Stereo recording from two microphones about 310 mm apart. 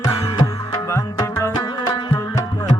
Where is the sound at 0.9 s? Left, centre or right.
Centre.